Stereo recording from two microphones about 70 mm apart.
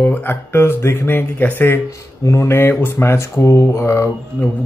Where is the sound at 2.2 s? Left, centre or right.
Left.